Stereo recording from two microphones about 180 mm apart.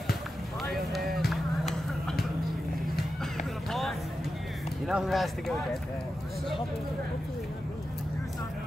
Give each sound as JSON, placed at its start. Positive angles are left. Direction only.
{"t": 0.9, "sound": "music", "side_deg": 0}
{"t": 4.8, "sound": "speech", "side_deg": 0}